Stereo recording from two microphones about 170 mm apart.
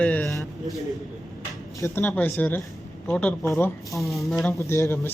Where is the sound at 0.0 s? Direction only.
5° left (ahead or behind).